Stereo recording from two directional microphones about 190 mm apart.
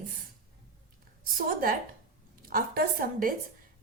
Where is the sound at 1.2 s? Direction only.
50° right (ahead or behind).